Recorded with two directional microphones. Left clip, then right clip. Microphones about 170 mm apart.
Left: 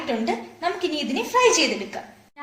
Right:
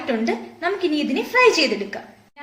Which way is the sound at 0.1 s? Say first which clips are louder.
Right 3 dB; 50° right (ahead or behind).